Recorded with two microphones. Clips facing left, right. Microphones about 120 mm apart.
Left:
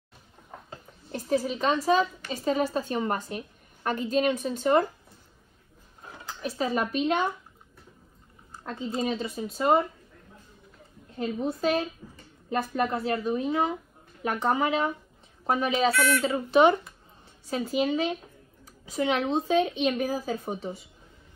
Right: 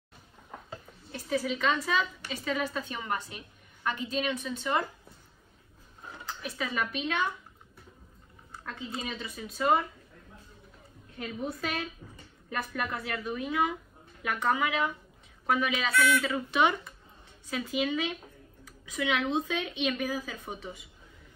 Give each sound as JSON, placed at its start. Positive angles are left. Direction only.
{"t": 1.1, "sound": "a woman's voice", "side_deg": 40}
{"t": 6.4, "sound": "a woman's voice", "side_deg": 35}
{"t": 8.6, "sound": "a woman's voice", "side_deg": 35}
{"t": 11.1, "sound": "a woman's voice", "side_deg": 30}